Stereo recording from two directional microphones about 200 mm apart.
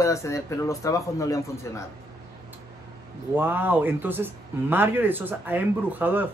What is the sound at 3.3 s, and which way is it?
Speech, 10° right (ahead or behind).